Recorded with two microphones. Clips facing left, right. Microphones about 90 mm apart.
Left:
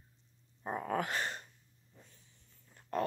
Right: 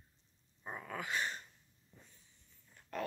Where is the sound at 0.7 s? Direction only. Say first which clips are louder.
Left 7 dB; 45° left (ahead or behind).